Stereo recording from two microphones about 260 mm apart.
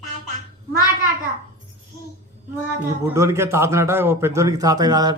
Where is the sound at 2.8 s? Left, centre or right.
Centre.